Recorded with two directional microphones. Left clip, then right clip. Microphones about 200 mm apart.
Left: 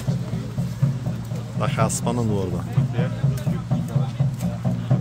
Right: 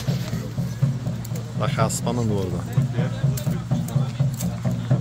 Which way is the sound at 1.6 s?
5° left (ahead or behind).